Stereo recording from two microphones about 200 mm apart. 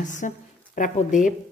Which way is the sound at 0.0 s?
40° left (ahead or behind).